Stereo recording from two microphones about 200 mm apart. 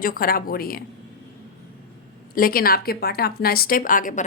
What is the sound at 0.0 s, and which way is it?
Speech, 45° left (ahead or behind).